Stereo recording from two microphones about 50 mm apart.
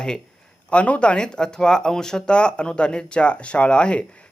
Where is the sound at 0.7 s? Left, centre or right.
Left.